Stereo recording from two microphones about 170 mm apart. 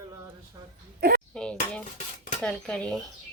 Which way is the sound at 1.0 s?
65° right (ahead or behind).